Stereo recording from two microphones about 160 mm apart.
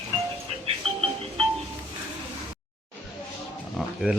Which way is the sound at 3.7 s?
Centre (ahead or behind).